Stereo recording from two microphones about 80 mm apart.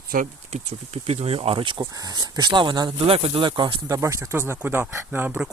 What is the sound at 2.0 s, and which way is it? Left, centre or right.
Speech, right.